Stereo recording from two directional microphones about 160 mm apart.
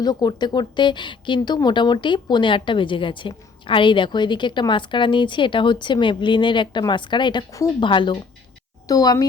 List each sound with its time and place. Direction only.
0.0 s speech: 25° left (ahead or behind)